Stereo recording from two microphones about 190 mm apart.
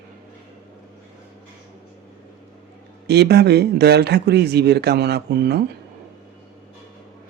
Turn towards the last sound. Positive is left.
turn(degrees=-60)  # may be behind; listen again after turning